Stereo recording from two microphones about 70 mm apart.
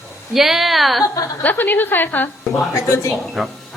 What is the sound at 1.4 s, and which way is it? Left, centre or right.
Speech, left.